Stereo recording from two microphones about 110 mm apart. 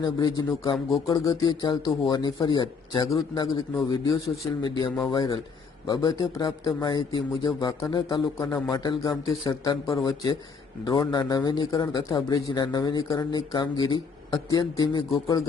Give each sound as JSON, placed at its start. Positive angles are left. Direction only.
{"t": 0.0, "sound": "speech", "side_deg": 35}
{"t": 9.2, "sound": "speech", "side_deg": 30}